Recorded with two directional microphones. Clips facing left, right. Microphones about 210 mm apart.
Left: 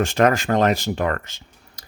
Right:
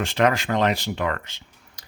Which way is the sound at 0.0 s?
45° left (ahead or behind).